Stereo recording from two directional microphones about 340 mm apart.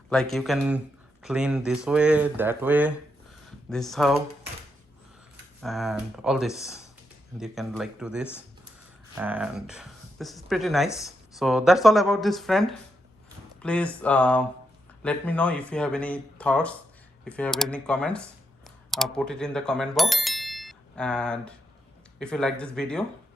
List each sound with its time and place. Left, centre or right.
0.1 s speech: centre
5.6 s speech: centre